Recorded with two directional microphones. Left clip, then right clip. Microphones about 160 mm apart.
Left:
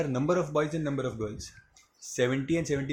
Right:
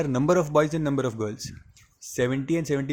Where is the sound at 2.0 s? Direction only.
35° right (ahead or behind).